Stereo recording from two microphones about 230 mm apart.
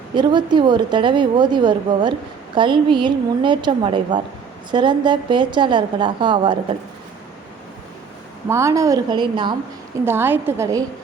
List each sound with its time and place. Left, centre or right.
0.1 s a woman's voice: centre
8.4 s a woman's voice: centre
10.1 s a woman's voice: centre